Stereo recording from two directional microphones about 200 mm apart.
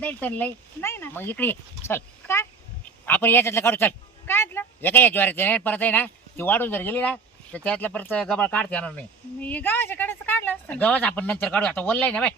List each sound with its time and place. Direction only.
0.0 s a man's voice: 10° left (ahead or behind)